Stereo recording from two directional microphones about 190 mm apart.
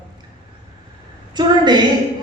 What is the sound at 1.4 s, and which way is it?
Speech, 25° right (ahead or behind).